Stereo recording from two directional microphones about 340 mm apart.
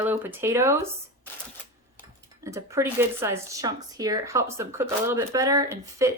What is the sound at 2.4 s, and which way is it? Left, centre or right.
Speech, centre.